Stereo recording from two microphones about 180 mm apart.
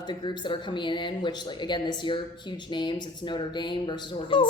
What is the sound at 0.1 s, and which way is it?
Speech, 25° left (ahead or behind).